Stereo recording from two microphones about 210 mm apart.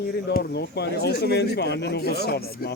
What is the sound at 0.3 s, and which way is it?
Speech, 50° left (ahead or behind).